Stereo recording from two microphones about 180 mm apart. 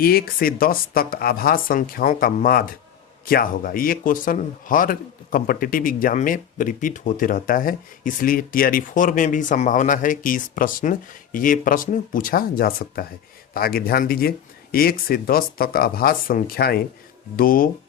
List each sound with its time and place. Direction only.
0.0 s speech: 55° left (ahead or behind)